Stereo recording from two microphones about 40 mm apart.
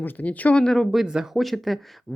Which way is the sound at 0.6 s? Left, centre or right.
Centre.